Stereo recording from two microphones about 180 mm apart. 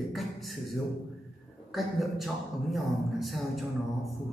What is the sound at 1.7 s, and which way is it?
Speech, centre (ahead or behind).